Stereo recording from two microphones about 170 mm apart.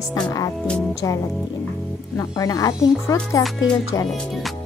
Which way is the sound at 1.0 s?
20° left (ahead or behind).